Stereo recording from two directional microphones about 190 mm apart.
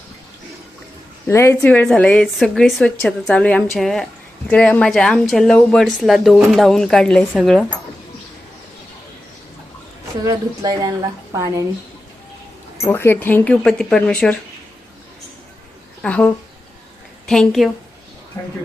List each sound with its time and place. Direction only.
1.3 s a woman's voice: 15° left (ahead or behind)
10.2 s a woman's voice: 20° right (ahead or behind)
12.8 s speech: 10° left (ahead or behind)
16.0 s a woman's voice: 5° left (ahead or behind)
18.4 s speech: 15° left (ahead or behind)